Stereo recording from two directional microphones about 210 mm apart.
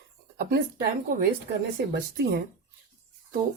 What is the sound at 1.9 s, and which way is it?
Speech, 50° right (ahead or behind).